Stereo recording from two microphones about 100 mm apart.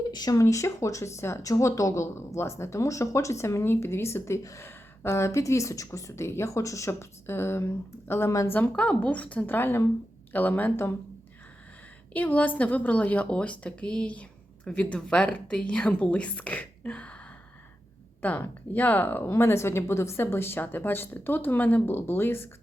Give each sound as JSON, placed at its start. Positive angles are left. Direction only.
{"t": 0.1, "sound": "speech", "side_deg": 40}
{"t": 8.5, "sound": "speech", "side_deg": 15}
{"t": 12.1, "sound": "speech", "side_deg": 15}